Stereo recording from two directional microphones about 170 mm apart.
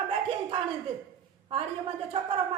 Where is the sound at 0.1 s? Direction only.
35° right (ahead or behind).